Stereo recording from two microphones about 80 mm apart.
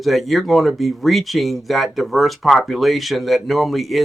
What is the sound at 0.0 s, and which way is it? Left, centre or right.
Speech, centre.